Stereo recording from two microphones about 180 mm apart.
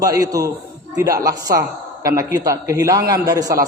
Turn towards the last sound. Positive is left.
turn(degrees=-20)  # may be behind; listen again after turning